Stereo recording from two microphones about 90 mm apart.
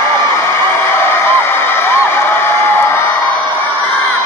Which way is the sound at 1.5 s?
25° left (ahead or behind).